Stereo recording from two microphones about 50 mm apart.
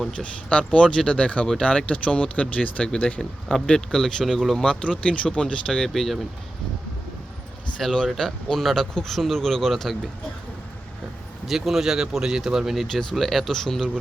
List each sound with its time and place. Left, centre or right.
0.2 s speech: left
3.8 s speech: centre
4.5 s speech: centre
7.8 s speech: centre
11.4 s speech: centre
12.9 s speech: centre